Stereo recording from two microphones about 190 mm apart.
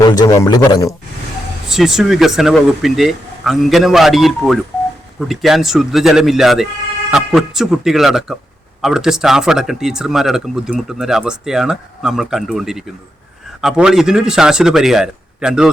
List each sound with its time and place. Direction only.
0.0 s a man's voice: 20° left (ahead or behind)
1.7 s speech: centre (ahead or behind)